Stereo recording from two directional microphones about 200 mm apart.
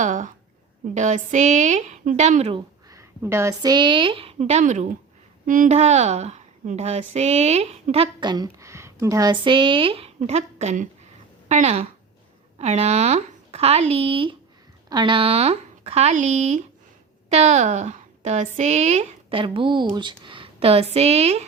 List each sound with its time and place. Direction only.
0.0 s a woman's voice: 40° right (ahead or behind)